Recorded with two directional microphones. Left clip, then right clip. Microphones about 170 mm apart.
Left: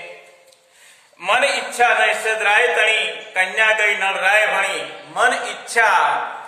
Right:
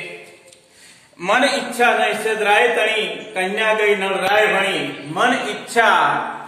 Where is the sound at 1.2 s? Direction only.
25° left (ahead or behind).